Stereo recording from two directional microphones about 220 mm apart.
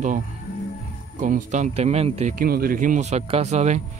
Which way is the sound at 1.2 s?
35° right (ahead or behind).